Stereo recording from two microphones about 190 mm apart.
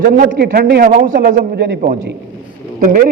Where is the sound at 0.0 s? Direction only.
50° right (ahead or behind).